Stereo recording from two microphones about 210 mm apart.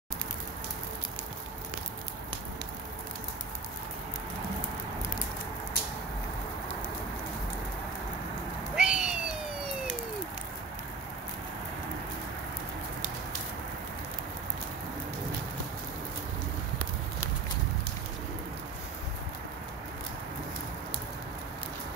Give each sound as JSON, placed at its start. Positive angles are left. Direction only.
{"t": 8.7, "sound": "owl", "side_deg": -5}